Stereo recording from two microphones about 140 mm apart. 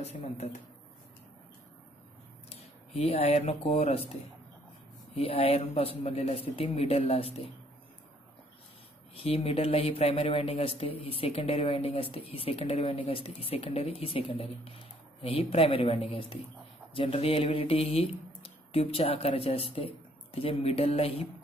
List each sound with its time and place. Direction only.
0.0 s a man's voice: 50° left (ahead or behind)
2.9 s a man's voice: 50° left (ahead or behind)
5.1 s a man's voice: 45° left (ahead or behind)
9.1 s a man's voice: 45° left (ahead or behind)